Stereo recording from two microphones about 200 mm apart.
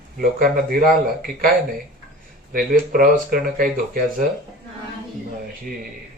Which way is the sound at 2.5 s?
45° right (ahead or behind).